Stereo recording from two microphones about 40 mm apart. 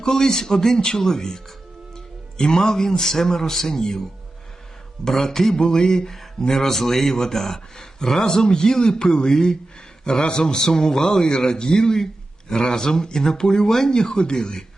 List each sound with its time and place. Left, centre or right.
0.0 s speech: centre
2.4 s speech: centre
5.0 s a man's voice: centre